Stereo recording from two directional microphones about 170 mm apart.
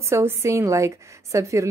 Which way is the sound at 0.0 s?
15° right (ahead or behind).